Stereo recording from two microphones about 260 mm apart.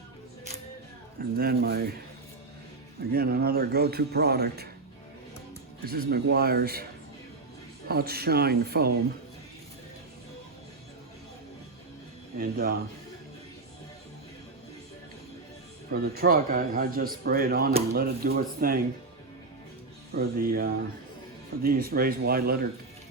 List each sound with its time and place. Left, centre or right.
1.4 s a man's voice: right
3.0 s a man's voice: right
5.8 s a man's voice: right
7.9 s a man's voice: right
12.4 s a man's voice: right
15.9 s a man's voice: right
20.1 s a man's voice: right